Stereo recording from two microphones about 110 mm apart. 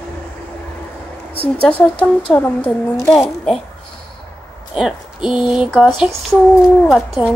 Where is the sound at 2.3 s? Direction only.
20° left (ahead or behind).